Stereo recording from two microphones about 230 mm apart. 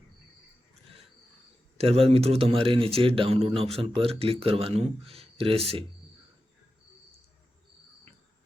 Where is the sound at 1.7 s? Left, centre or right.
Right.